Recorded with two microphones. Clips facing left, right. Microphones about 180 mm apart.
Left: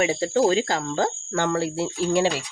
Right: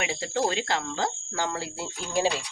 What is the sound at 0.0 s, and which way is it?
Speech, 40° left (ahead or behind).